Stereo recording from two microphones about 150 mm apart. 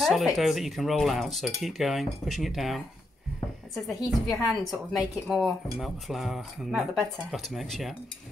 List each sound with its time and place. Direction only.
0.0 s a woman's voice: centre (ahead or behind)